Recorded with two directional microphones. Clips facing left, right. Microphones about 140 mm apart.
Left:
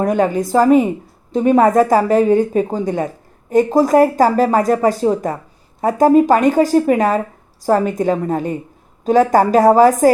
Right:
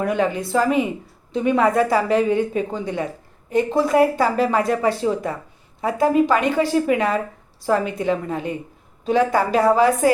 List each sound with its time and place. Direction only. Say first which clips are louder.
0.0 s speech: left 5 dB; 40° left (ahead or behind)